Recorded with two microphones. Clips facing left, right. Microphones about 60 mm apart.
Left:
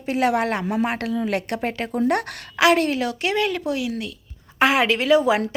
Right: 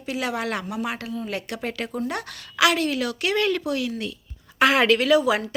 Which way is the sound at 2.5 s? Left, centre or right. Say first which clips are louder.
Left 3 dB; left.